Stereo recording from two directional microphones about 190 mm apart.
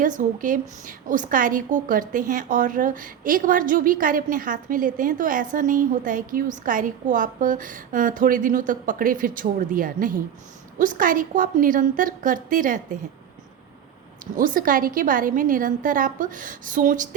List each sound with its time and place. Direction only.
0.0 s a woman's voice: 45° right (ahead or behind)
14.3 s a woman's voice: 45° right (ahead or behind)